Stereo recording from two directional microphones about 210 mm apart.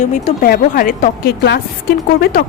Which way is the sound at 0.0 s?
40° left (ahead or behind).